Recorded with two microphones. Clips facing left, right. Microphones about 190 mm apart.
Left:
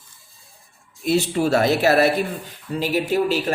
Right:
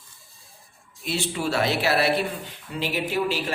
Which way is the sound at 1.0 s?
45° left (ahead or behind).